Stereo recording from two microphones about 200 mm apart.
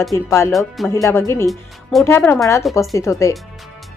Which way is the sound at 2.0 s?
10° left (ahead or behind).